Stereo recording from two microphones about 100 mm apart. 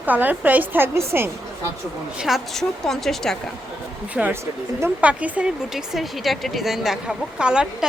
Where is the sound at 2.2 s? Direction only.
Centre (ahead or behind).